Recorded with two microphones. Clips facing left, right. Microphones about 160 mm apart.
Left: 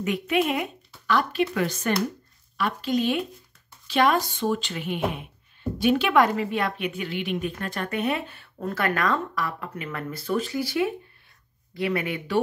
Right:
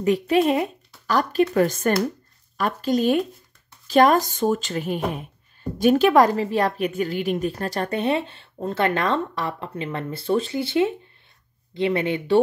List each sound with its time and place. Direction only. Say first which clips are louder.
0.0 s a woman's voice: right 5 dB; 35° right (ahead or behind)